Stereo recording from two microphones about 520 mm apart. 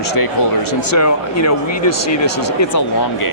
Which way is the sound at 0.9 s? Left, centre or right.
Left.